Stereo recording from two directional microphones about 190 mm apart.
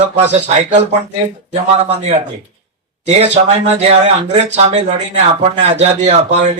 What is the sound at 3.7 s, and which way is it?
Speech, 35° right (ahead or behind).